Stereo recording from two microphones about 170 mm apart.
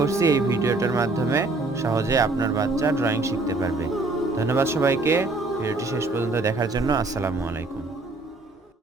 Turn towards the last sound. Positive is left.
turn(degrees=-15)  # may be behind; listen again after turning